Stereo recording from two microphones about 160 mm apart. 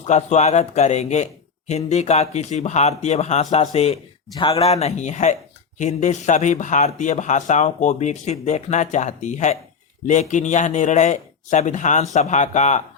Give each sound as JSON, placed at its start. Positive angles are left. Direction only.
{"t": 0.0, "sound": "speech", "side_deg": 45}
{"t": 4.7, "sound": "speech", "side_deg": 40}